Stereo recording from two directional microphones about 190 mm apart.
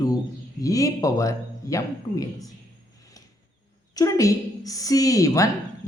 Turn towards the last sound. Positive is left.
turn(degrees=15)  # may be behind; listen again after turning